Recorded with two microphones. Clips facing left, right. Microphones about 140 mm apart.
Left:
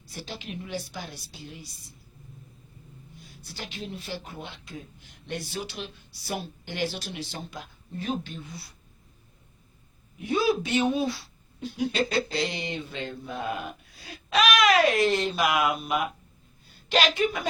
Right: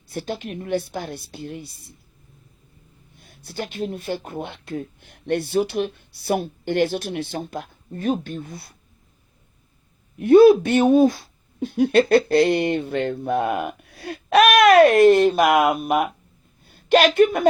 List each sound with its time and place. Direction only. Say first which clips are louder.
0.1 s speech: right 9 dB; 55° right (ahead or behind)
3.2 s speech: right 11 dB; 55° right (ahead or behind)
10.2 s a woman's voice: right 14 dB; 55° right (ahead or behind)